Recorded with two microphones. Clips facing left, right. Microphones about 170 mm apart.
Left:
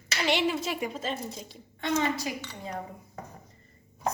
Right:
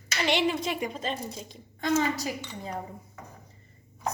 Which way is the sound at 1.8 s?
40° right (ahead or behind).